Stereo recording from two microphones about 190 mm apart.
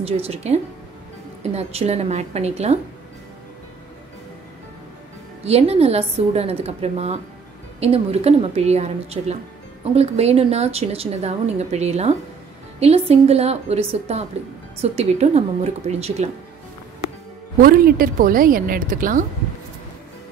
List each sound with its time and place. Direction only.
0.0 s a woman's voice: 30° right (ahead or behind)
5.4 s a woman's voice: 35° right (ahead or behind)
17.6 s a woman's voice: 50° right (ahead or behind)